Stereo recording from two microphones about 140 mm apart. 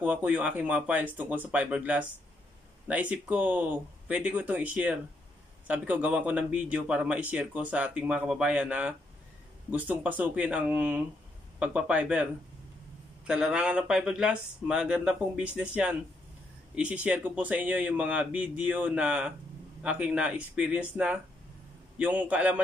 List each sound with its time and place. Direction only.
0.0 s speech: 10° right (ahead or behind)
13.3 s speech: 5° right (ahead or behind)